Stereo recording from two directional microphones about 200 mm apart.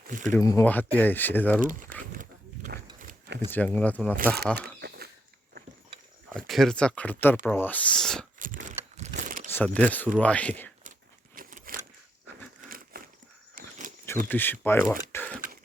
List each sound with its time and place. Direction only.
0.3 s speech: 15° left (ahead or behind)
1.6 s crumpling: 40° right (ahead or behind)
3.4 s speech: 10° left (ahead or behind)
4.5 s a sound: 55° right (ahead or behind)
6.3 s speech: centre (ahead or behind)
8.4 s a sound: 40° right (ahead or behind)
9.5 s speech: 10° left (ahead or behind)
11.3 s a sound: 45° right (ahead or behind)
12.6 s biting: 45° right (ahead or behind)
13.6 s a sound: 40° right (ahead or behind)
14.3 s speech: 10° left (ahead or behind)
15.1 s typing: 10° left (ahead or behind)